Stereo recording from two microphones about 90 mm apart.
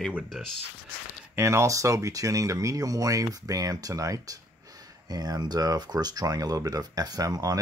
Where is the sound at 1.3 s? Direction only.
30° right (ahead or behind).